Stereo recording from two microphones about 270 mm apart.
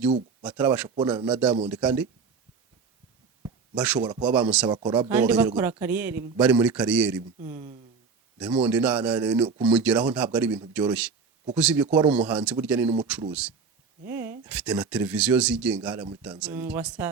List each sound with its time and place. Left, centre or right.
0.4 s a man's voice: centre
3.8 s a man's voice: centre
4.7 s speech: centre
5.1 s a man's voice: centre
7.4 s a man's voice: centre